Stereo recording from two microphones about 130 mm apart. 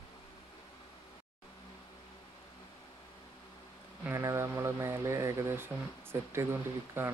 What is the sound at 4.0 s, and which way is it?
Speech, 20° right (ahead or behind).